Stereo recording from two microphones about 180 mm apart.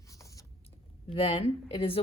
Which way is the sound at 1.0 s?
30° left (ahead or behind).